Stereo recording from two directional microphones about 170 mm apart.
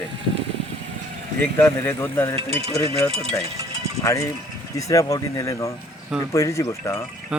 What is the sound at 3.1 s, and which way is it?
Speech, 35° right (ahead or behind).